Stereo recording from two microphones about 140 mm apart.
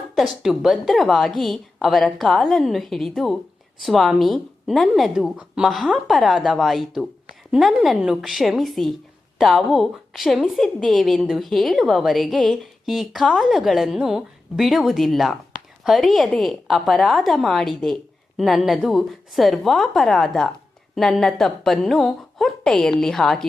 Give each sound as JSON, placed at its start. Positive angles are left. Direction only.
{"t": 0.2, "sound": "a woman's voice", "side_deg": 0}